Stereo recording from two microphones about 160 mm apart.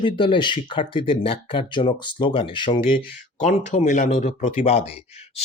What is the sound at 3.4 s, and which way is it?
Speech, 50° left (ahead or behind).